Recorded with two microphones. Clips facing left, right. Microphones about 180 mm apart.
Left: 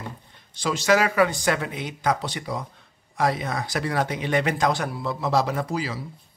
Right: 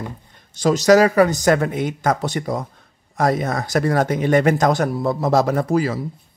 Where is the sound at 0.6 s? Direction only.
40° right (ahead or behind).